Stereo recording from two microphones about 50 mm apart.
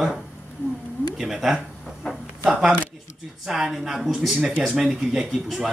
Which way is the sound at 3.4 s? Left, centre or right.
Centre.